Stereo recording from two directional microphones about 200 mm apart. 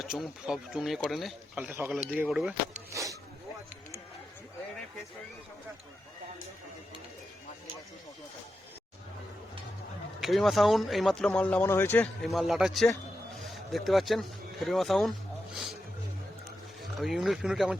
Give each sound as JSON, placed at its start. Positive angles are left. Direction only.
{"t": 0.0, "sound": "speech", "side_deg": 0}
{"t": 2.9, "sound": "speech", "side_deg": -15}
{"t": 10.2, "sound": "speech", "side_deg": 0}
{"t": 17.0, "sound": "speech", "side_deg": 0}